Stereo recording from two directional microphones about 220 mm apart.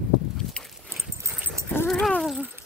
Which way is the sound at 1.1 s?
10° right (ahead or behind).